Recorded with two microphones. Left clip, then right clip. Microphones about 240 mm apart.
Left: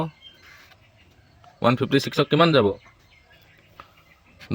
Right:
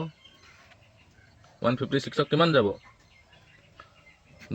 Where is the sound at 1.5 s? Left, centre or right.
Left.